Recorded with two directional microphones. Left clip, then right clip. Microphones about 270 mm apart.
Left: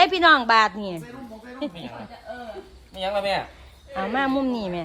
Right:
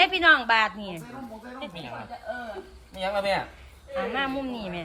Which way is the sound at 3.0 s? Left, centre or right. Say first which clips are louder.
Left 2 dB; centre.